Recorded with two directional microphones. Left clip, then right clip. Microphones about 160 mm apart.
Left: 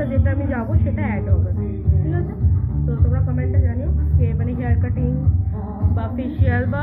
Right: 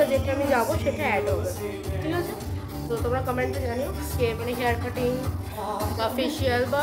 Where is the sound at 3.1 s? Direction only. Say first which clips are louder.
Right 3 dB; 35° right (ahead or behind).